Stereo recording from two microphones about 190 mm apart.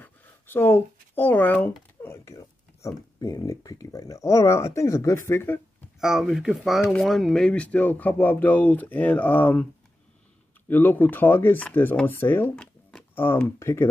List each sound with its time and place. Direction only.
0.0 s a sound: 10° left (ahead or behind)
3.2 s speech: 20° left (ahead or behind)
5.9 s speech: centre (ahead or behind)
10.7 s speech: 10° left (ahead or behind)